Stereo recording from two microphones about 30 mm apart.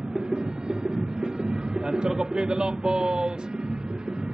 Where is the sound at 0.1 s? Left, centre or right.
Right.